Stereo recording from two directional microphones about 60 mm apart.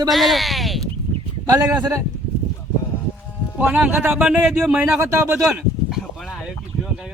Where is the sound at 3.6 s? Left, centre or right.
Centre.